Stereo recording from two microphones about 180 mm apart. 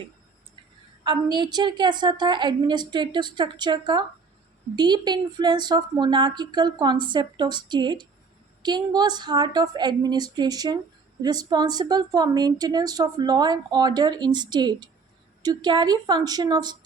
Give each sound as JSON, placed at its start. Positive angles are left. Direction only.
{"t": 1.0, "sound": "a woman's voice", "side_deg": -25}